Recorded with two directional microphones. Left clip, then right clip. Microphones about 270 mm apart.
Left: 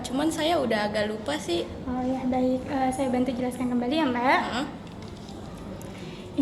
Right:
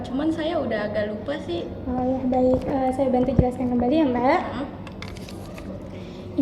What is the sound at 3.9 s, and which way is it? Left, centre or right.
Speech, left.